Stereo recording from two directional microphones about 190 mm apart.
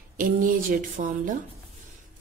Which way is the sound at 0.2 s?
45° right (ahead or behind).